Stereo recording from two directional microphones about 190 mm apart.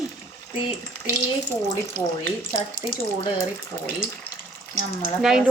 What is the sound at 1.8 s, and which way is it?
Speech, 15° left (ahead or behind).